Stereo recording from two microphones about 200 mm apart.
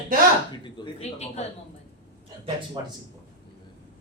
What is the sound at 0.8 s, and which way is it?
Speech, 20° left (ahead or behind).